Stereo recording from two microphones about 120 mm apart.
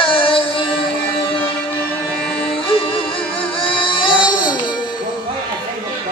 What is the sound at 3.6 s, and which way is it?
Child singing, 45° left (ahead or behind).